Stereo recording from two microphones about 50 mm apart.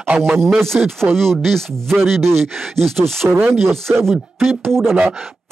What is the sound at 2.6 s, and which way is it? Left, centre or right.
Speech, centre.